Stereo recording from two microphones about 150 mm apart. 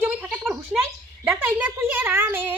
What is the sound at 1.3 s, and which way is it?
A woman's voice, 15° right (ahead or behind).